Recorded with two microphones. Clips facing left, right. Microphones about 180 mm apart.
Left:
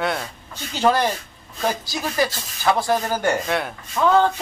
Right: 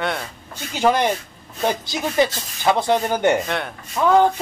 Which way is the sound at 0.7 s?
15° right (ahead or behind).